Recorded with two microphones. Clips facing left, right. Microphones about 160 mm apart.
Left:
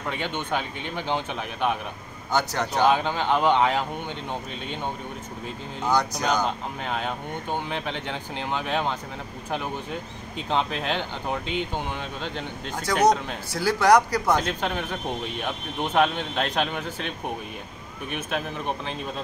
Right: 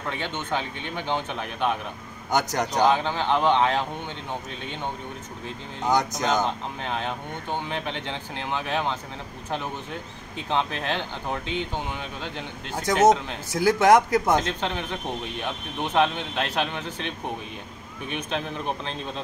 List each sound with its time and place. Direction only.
0.1 s speech: 15° left (ahead or behind)
2.3 s a man's voice: 15° right (ahead or behind)
2.9 s speech: 15° left (ahead or behind)
5.8 s speech: 20° right (ahead or behind)
6.8 s speech: 15° left (ahead or behind)
10.5 s speech: 15° left (ahead or behind)
12.2 s speech: 15° right (ahead or behind)
14.5 s speech: 10° left (ahead or behind)